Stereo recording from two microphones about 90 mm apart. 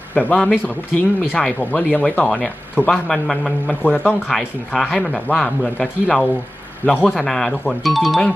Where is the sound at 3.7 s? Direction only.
20° left (ahead or behind).